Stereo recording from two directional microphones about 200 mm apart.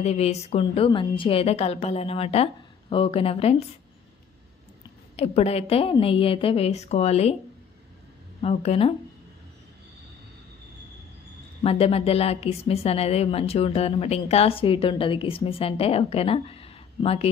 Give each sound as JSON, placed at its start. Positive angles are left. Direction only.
{"t": 0.0, "sound": "a woman's voice", "side_deg": 30}
{"t": 5.1, "sound": "a woman's voice", "side_deg": 30}
{"t": 8.4, "sound": "a woman's voice", "side_deg": 30}
{"t": 11.6, "sound": "a woman's voice", "side_deg": 30}